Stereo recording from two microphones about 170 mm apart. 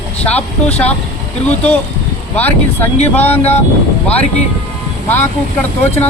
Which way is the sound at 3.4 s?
40° left (ahead or behind).